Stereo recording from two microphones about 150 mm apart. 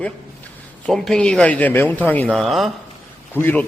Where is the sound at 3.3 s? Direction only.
15° left (ahead or behind).